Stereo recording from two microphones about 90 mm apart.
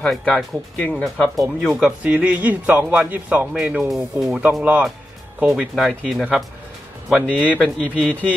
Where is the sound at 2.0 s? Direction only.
15° right (ahead or behind).